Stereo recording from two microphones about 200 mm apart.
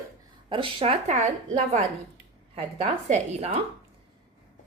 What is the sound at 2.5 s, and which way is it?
Speech, 30° right (ahead or behind).